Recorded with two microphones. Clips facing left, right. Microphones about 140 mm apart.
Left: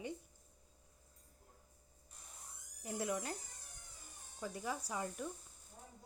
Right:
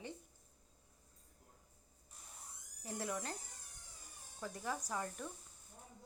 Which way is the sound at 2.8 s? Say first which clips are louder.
Left 2 dB; 10° left (ahead or behind).